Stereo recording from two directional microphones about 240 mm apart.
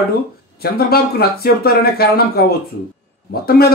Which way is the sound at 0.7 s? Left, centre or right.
Left.